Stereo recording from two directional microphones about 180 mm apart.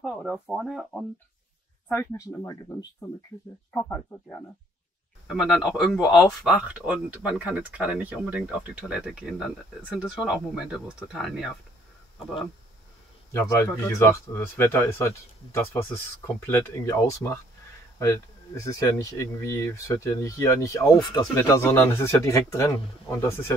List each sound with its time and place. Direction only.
0.0 s speech: centre (ahead or behind)
1.9 s speech: 15° left (ahead or behind)
3.7 s speech: 5° left (ahead or behind)
5.3 s speech: 5° right (ahead or behind)
13.3 s speech: 15° left (ahead or behind)